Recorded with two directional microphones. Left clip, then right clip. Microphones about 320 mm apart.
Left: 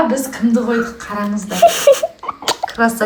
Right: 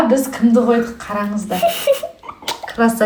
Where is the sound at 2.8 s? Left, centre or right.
Centre.